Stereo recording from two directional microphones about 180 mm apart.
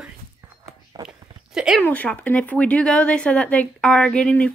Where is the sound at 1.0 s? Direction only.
20° right (ahead or behind).